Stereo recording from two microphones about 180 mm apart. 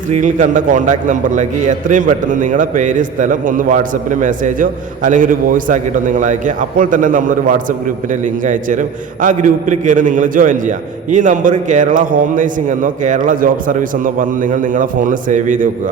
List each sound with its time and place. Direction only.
0.1 s a man's voice: 45° right (ahead or behind)